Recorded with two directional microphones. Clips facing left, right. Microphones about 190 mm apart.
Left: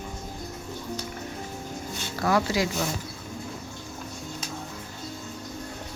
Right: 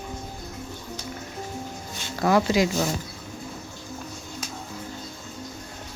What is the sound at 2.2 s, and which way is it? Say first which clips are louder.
Speech: right 4 dB; 20° right (ahead or behind).